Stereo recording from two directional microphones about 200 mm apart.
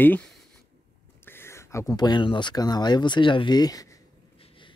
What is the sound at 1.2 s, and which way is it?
Speech, 10° left (ahead or behind).